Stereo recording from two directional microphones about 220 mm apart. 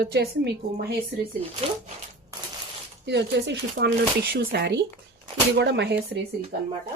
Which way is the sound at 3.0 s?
50° right (ahead or behind).